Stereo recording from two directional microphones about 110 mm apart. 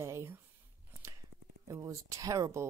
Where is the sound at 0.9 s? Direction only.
25° right (ahead or behind).